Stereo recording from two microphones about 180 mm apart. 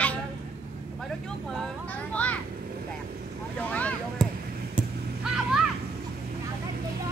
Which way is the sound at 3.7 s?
5° left (ahead or behind).